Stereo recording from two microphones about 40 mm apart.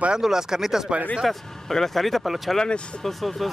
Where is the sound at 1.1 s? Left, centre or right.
Centre.